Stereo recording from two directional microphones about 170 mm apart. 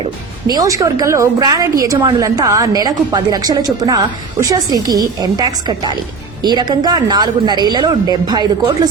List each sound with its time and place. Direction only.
0.0 s a woman's voice: 25° right (ahead or behind)